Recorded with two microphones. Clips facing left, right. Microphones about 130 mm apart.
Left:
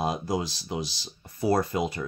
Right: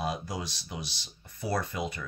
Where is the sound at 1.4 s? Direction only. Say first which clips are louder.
Left 7 dB; 40° left (ahead or behind).